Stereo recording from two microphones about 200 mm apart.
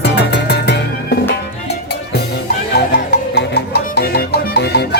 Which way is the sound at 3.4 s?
55° left (ahead or behind).